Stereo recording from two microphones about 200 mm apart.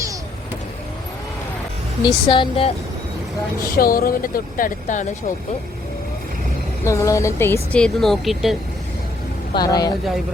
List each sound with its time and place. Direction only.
2.0 s speech: 25° left (ahead or behind)
3.7 s speech: 45° left (ahead or behind)
6.8 s speech: 15° left (ahead or behind); by 8.5 s centre (ahead or behind)
9.6 s speech: 20° left (ahead or behind)